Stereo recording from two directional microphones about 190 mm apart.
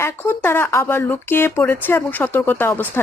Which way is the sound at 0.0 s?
10° left (ahead or behind).